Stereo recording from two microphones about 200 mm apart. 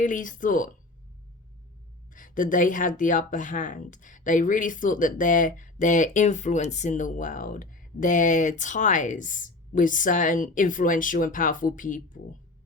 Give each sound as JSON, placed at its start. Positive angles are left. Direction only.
{"t": 0.0, "sound": "speech", "side_deg": 40}
{"t": 2.1, "sound": "speech", "side_deg": 40}